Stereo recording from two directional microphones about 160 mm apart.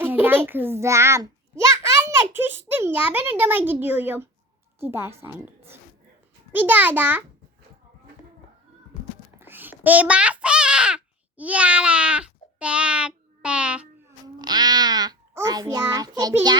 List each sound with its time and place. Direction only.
0.0 s a child's voice: 10° right (ahead or behind)
9.4 s a sound: 10° right (ahead or behind)
14.3 s a child's voice: 25° right (ahead or behind)